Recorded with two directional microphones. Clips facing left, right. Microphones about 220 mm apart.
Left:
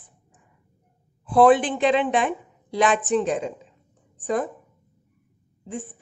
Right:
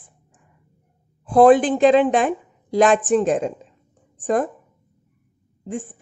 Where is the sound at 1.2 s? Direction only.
45° right (ahead or behind).